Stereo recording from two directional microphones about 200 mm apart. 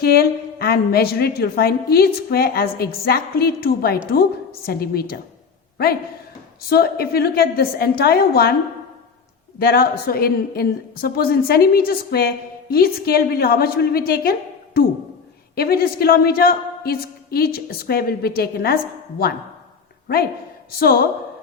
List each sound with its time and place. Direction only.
0.0 s a woman's voice: 50° left (ahead or behind)
9.6 s a woman's voice: 50° left (ahead or behind)
20.7 s a woman's voice: 50° left (ahead or behind)